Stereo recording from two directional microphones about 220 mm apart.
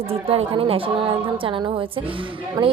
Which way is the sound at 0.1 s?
25° right (ahead or behind).